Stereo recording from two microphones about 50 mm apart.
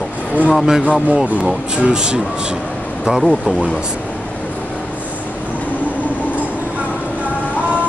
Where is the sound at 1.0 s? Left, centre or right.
Right.